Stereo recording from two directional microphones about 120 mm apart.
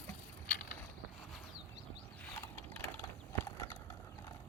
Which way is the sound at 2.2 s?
15° left (ahead or behind).